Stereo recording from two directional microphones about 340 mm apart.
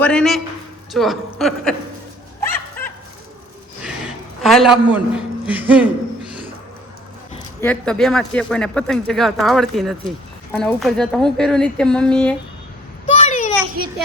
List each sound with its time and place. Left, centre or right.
0.0 s speech: centre
2.4 s dog: centre
4.4 s speech: centre
7.6 s speech: centre
13.1 s a sound: centre